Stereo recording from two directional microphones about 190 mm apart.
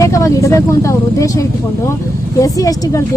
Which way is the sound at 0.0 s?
15° left (ahead or behind).